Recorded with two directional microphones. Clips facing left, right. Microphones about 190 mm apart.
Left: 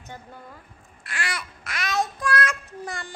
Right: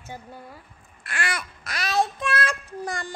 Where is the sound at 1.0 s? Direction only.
55° right (ahead or behind).